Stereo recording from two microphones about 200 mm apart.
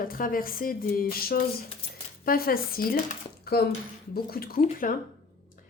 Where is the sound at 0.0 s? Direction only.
45° left (ahead or behind).